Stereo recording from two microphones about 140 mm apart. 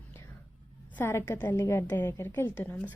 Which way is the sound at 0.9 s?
15° left (ahead or behind).